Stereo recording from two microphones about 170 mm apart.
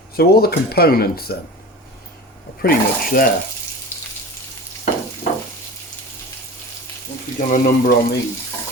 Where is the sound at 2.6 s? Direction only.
55° left (ahead or behind).